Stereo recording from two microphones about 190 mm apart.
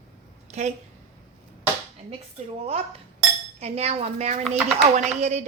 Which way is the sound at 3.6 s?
35° right (ahead or behind).